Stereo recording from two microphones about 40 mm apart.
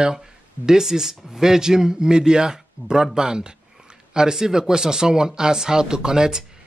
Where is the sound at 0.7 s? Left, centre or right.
Centre.